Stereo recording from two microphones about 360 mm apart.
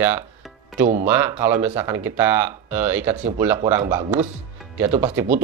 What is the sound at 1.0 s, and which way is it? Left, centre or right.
Speech, centre.